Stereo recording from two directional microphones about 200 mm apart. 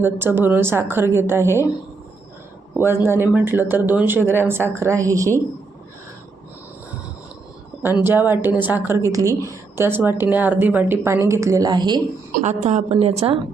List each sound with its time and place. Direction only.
0.0 s a woman's voice: 10° right (ahead or behind)
2.7 s a woman's voice: 10° right (ahead or behind)
8.0 s a woman's voice: 10° right (ahead or behind)
12.3 s a woman's voice: 35° right (ahead or behind)